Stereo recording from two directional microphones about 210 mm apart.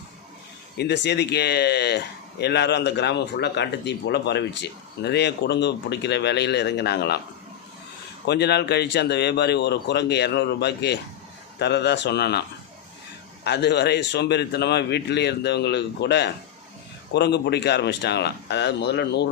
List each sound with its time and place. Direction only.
0.8 s speech: 55° left (ahead or behind)
8.3 s speech: 50° left (ahead or behind)
13.4 s speech: 50° left (ahead or behind)